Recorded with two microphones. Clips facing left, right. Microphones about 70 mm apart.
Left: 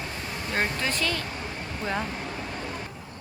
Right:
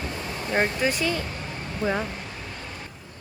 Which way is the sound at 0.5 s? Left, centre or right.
Centre.